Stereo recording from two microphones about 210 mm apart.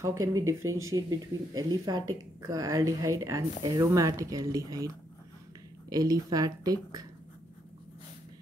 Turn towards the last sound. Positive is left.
turn(degrees=-20)  # may be behind; listen again after turning